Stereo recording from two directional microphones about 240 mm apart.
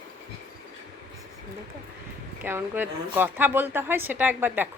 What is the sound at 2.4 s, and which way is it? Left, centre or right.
A woman's voice, centre.